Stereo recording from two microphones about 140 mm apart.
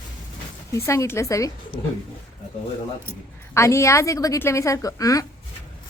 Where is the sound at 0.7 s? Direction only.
20° left (ahead or behind).